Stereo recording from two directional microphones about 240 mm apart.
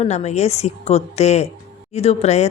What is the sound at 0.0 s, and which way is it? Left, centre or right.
Speech, left.